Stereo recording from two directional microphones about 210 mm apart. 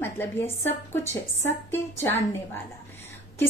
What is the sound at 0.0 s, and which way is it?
A woman's voice, 10° left (ahead or behind).